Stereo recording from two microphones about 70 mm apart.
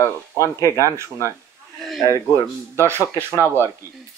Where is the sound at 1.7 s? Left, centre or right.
Centre.